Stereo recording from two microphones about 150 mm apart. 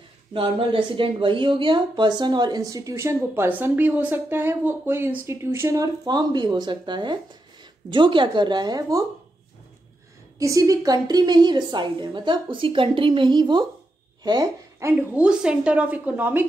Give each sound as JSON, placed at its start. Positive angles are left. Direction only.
{"t": 0.3, "sound": "a woman's voice", "side_deg": -35}
{"t": 10.4, "sound": "a woman's voice", "side_deg": -20}
{"t": 15.1, "sound": "a woman's voice", "side_deg": -5}